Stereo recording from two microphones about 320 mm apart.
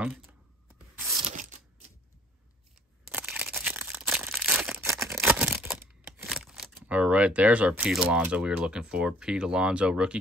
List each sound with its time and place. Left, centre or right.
0.0 s computer keyboard: centre
1.0 s tearing: right
3.1 s crushing: centre